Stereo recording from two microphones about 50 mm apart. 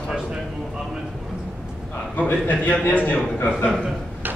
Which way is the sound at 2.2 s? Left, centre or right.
Left.